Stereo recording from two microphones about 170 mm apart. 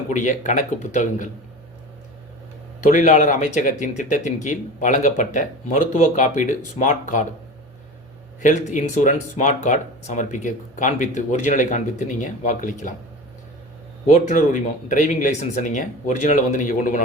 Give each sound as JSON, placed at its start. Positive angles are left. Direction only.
{"t": 0.1, "sound": "speech", "side_deg": 45}
{"t": 2.8, "sound": "speech", "side_deg": 50}
{"t": 8.4, "sound": "speech", "side_deg": 45}
{"t": 14.3, "sound": "speech", "side_deg": 50}